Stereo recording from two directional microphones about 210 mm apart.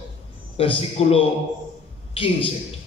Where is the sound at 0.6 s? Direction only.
25° left (ahead or behind).